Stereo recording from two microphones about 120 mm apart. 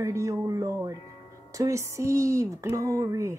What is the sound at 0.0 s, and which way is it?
Speech, 25° right (ahead or behind).